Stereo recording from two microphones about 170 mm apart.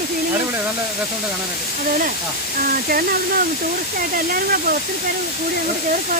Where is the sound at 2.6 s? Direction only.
60° right (ahead or behind).